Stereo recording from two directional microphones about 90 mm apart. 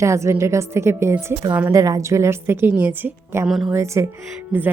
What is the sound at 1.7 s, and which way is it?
A woman's voice, 35° right (ahead or behind).